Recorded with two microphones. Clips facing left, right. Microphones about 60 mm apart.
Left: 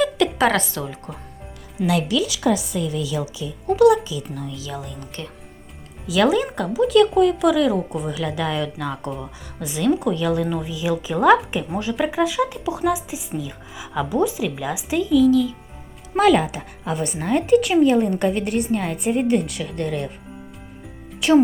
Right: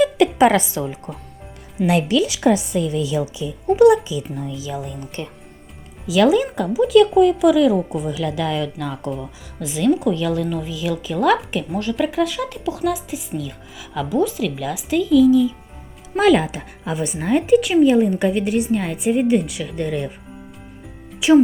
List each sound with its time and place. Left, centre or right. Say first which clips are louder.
0.0 s a woman's voice: right 4 dB; centre
1.9 s a woman's voice: right 3 dB; right
6.1 s speech: right 3 dB; centre
11.3 s speech: right 1 dB; centre
15.3 s speech: right 3 dB; centre
21.1 s music: right 3 dB; centre